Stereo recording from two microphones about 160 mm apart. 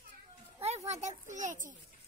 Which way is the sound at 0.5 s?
40° right (ahead or behind).